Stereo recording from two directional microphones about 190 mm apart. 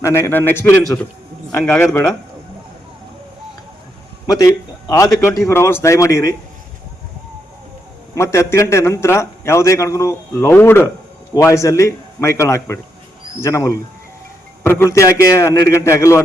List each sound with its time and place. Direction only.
0.0 s a man's voice: 15° left (ahead or behind)
4.4 s a man's voice: 15° left (ahead or behind)
8.1 s a man's voice: 15° left (ahead or behind)